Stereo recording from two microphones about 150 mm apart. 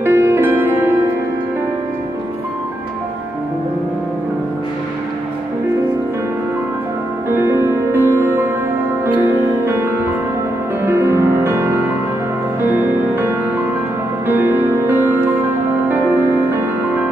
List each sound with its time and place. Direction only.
0.0 s music: 15° right (ahead or behind)
7.2 s music: 15° right (ahead or behind)
10.9 s music: 15° right (ahead or behind)